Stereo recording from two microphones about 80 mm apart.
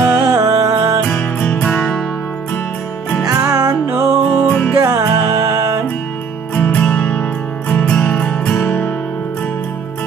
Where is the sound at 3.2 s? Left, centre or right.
Right.